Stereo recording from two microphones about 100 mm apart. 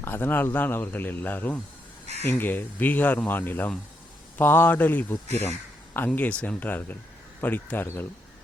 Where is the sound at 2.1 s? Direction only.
90° right.